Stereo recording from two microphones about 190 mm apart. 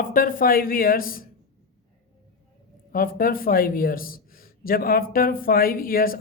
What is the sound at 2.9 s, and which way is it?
A man's voice, 50° left (ahead or behind).